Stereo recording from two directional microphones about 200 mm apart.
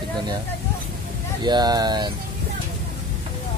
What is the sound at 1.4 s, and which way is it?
Speech, 20° right (ahead or behind).